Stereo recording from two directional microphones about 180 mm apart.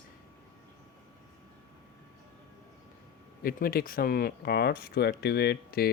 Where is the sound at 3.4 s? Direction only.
55° left (ahead or behind).